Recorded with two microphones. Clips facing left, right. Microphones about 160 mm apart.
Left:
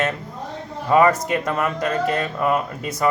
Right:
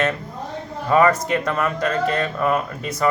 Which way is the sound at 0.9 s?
20° left (ahead or behind).